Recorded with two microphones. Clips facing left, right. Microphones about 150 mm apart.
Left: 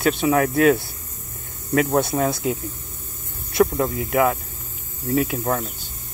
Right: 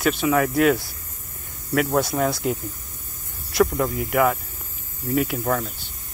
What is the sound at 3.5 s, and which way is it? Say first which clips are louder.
Speech: left 1 dB; 25° left (ahead or behind).